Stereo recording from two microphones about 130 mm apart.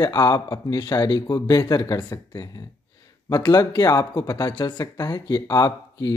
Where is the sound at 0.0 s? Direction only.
30° left (ahead or behind).